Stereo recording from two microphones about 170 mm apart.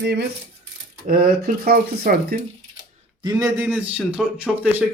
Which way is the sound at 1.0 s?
60° right (ahead or behind).